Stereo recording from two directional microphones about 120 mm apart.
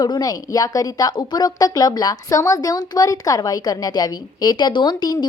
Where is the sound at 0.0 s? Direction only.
30° left (ahead or behind).